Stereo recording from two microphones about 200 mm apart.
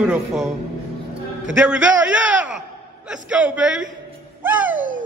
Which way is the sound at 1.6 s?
5° right (ahead or behind).